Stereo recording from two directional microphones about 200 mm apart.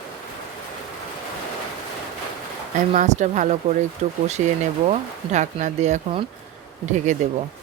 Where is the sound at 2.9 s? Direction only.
35° right (ahead or behind).